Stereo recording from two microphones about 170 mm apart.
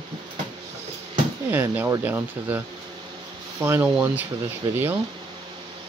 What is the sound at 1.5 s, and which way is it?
Speech, 10° right (ahead or behind).